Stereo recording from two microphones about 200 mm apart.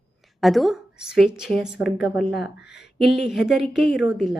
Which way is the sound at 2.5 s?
55° left (ahead or behind).